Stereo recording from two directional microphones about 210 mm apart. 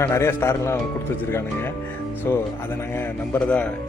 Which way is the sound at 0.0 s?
15° left (ahead or behind).